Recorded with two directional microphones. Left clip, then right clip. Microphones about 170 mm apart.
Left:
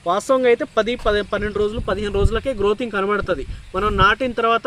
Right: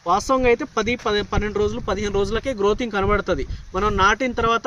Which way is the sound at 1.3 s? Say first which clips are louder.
Left 1 dB; 20° right (ahead or behind).